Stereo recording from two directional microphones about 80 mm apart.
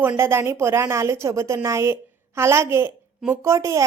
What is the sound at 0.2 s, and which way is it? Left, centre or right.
A woman's voice, right.